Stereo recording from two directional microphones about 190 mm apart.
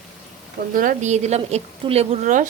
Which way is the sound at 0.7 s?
45° right (ahead or behind).